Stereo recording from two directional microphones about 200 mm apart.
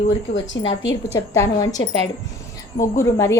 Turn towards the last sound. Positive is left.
turn(degrees=15)  # may be behind; listen again after turning